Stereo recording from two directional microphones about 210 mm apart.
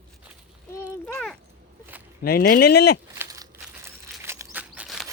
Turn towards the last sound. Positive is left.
turn(degrees=0)  # may be behind; listen again after turning